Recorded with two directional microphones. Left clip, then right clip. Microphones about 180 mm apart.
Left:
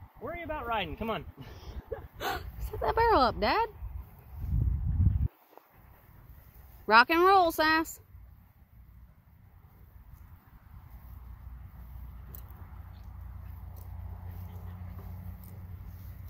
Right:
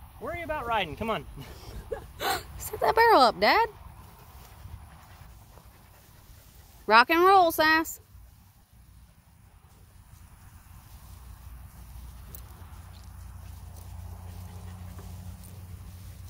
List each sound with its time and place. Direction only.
0.2 s speech: 40° right (ahead or behind)
1.6 s a sound: 15° right (ahead or behind)
2.1 s speech: 5° right (ahead or behind)
6.9 s speech: 5° right (ahead or behind)